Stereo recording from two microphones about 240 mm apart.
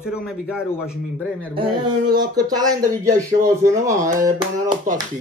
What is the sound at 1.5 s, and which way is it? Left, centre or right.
Speech, right.